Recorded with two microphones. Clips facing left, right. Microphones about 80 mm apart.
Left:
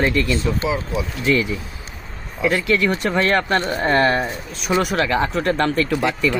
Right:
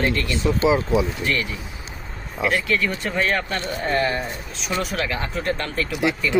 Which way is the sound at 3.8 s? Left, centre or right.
Left.